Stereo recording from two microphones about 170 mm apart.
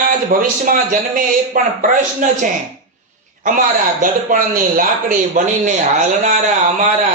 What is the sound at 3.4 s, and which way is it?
A man's voice, 50° right (ahead or behind).